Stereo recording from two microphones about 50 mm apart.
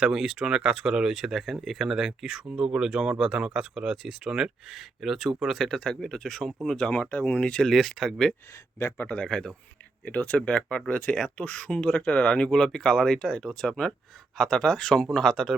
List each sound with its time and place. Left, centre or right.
0.0 s speech: centre
6.7 s speech: centre
7.6 s speech: centre
9.0 s speech: centre
10.1 s speech: left; by 15.5 s centre